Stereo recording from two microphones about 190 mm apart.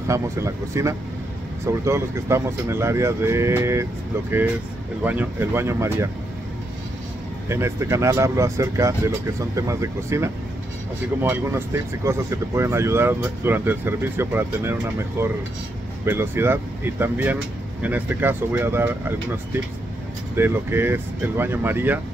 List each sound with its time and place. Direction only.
0.1 s speech: 15° right (ahead or behind)
5.0 s speech: 10° right (ahead or behind)
7.4 s speech: 15° right (ahead or behind)